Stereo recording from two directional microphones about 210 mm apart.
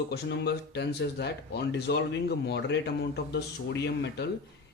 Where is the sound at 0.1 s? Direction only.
50° left (ahead or behind).